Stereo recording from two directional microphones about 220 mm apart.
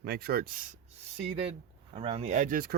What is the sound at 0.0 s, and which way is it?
Speech, 45° right (ahead or behind).